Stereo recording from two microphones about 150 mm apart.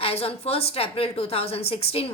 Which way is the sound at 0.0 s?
40° left (ahead or behind).